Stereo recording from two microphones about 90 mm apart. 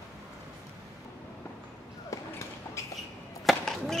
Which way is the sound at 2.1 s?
35° left (ahead or behind).